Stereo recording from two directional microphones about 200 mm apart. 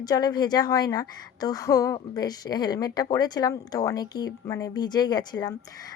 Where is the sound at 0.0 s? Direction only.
20° left (ahead or behind).